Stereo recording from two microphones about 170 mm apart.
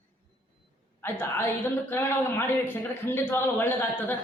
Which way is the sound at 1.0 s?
15° left (ahead or behind).